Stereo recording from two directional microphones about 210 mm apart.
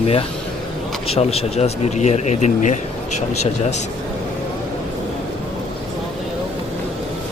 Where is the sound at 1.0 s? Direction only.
30° left (ahead or behind).